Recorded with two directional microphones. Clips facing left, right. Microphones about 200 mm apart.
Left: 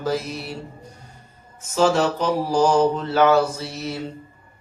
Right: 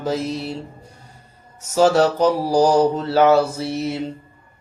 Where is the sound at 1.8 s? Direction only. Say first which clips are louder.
Right 4 dB; 40° right (ahead or behind); by 4.0 s 25° right (ahead or behind).